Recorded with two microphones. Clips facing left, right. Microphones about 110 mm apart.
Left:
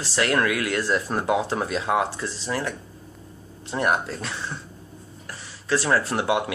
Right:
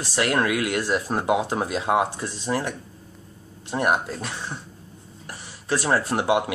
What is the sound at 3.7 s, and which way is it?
Speech, 15° right (ahead or behind).